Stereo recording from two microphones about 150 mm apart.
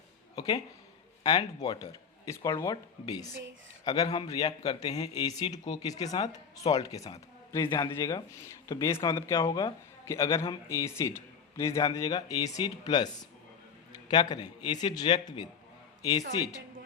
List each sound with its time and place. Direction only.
0.3 s a sound: 25° left (ahead or behind)
1.2 s a man's voice: 25° left (ahead or behind)
9.2 s speech: 20° left (ahead or behind)
9.5 s speech: 30° left (ahead or behind)
10.1 s speech: 20° left (ahead or behind)
14.1 s speech: 30° left (ahead or behind)